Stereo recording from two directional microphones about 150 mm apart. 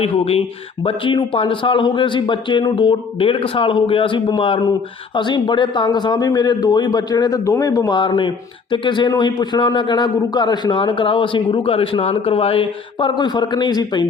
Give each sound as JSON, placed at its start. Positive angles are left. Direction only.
{"t": 0.0, "sound": "a man's voice", "side_deg": 40}